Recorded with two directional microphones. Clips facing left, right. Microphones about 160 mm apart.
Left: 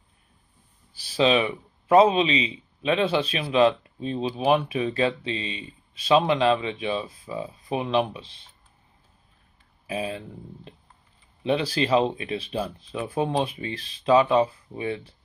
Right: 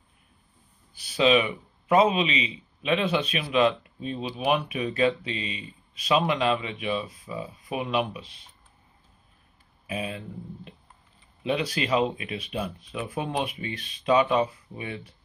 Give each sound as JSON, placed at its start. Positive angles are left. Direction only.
{"t": 0.9, "sound": "speech", "side_deg": 30}
{"t": 9.8, "sound": "speech", "side_deg": 30}